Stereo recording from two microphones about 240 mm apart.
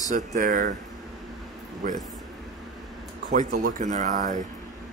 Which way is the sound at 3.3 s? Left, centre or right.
Right.